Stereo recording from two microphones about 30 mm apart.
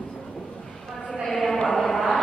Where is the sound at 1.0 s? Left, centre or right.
Centre.